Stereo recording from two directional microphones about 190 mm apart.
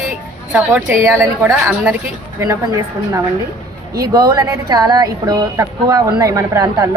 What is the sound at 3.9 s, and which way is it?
A woman's voice, 20° right (ahead or behind).